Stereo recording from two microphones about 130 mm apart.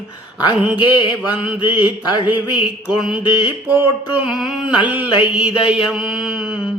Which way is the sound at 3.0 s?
10° right (ahead or behind).